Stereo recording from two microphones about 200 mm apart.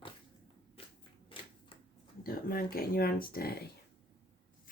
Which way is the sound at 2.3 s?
45° left (ahead or behind).